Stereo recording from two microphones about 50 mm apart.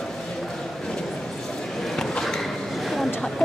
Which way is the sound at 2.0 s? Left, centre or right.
Centre.